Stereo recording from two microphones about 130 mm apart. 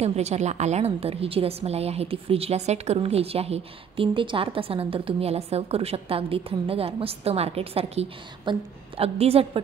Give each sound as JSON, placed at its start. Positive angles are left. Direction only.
{"t": 0.0, "sound": "a woman's voice", "side_deg": -55}